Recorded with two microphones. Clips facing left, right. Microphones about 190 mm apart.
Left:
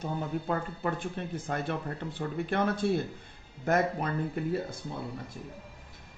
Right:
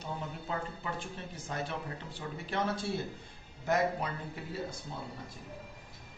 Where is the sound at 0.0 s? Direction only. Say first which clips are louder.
Left 7 dB; 55° left (ahead or behind).